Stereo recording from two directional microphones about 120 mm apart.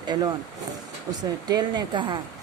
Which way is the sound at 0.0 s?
35° right (ahead or behind).